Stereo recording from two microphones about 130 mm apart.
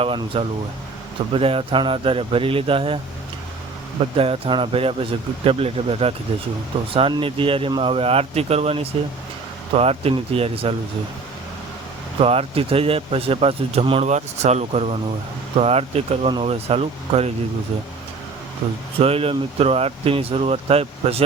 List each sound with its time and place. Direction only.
0.0 s speech: 45° right (ahead or behind)
4.2 s speech: 45° right (ahead or behind)
12.2 s speech: 50° right (ahead or behind)
18.6 s speech: 40° right (ahead or behind)